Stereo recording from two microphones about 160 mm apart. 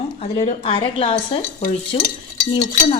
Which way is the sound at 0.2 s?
35° left (ahead or behind).